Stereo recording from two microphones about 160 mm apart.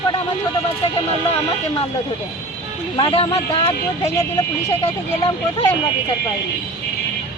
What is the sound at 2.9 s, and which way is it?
Speech, 30° left (ahead or behind).